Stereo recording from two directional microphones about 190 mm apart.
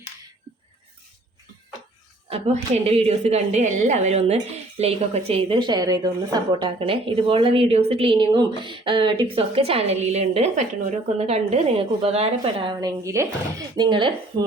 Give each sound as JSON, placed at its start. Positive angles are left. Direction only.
{"t": 2.3, "sound": "a woman's voice", "side_deg": -35}
{"t": 13.0, "sound": "a woman's voice", "side_deg": -15}